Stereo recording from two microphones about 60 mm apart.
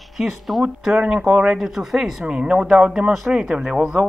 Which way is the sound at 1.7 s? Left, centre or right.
Centre.